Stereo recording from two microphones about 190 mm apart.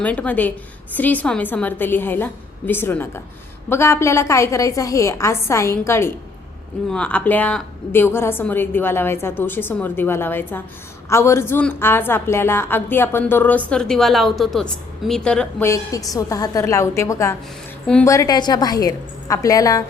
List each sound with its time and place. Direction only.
0.0 s a woman's voice: 5° left (ahead or behind)
18.1 s a woman's voice: 20° left (ahead or behind)